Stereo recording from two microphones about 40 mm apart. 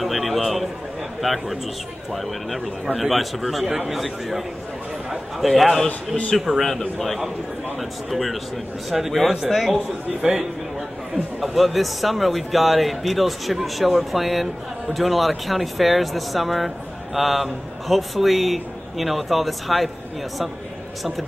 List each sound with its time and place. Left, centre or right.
0.0 s a sound: centre
1.2 s speech: centre
5.9 s a man's voice: left
8.1 s speech: centre
10.2 s a man's voice: centre
11.4 s speech: centre